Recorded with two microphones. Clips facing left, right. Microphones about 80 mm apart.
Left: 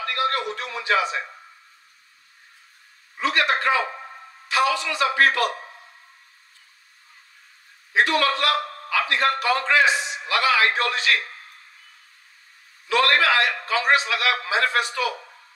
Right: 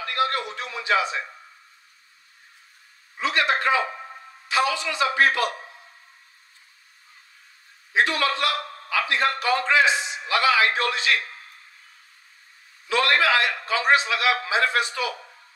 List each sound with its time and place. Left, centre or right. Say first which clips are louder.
0.0 s a sound: even; right
0.6 s a man's voice: left 1 dB; right
3.2 s a man's voice: left 1 dB; right
7.9 s a man's voice: left 2 dB; right
12.8 s a man's voice: left 1 dB; right